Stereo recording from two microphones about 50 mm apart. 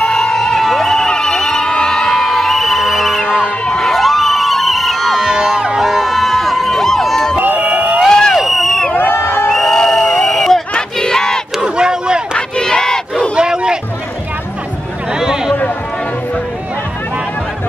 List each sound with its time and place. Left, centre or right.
0.0 s a sound: centre
3.6 s crowd: centre
5.3 s crowd: centre
7.3 s a sound: right
8.1 s crowd: centre
8.4 s crowd: centre
8.9 s crowd: left
9.5 s crowd: centre
10.7 s battle cry: centre
11.5 s crowd: centre
12.4 s battle cry: centre
13.4 s a sound: centre
15.1 s a sound: centre